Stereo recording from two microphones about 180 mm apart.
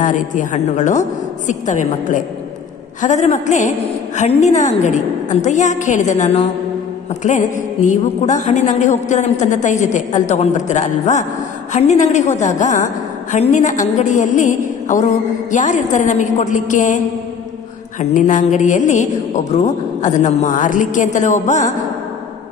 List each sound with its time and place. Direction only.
0.0 s a man's voice: 45° left (ahead or behind)
18.1 s a man's voice: 45° left (ahead or behind)